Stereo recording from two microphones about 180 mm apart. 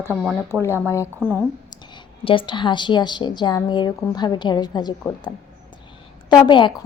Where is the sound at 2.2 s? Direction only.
30° left (ahead or behind).